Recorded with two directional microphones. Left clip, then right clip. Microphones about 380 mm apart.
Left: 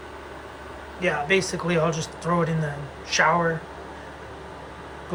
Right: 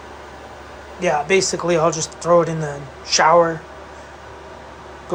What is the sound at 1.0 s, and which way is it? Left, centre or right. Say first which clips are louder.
Speech: right 5 dB; centre.